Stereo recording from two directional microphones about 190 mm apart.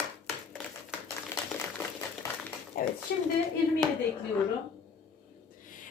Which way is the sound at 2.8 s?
45° left (ahead or behind).